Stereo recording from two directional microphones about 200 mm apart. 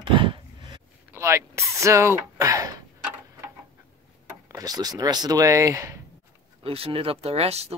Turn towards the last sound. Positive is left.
turn(degrees=-30)  # may be behind; listen again after turning